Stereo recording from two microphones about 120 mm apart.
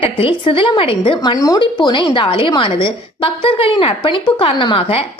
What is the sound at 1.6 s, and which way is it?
A woman's voice, 40° left (ahead or behind).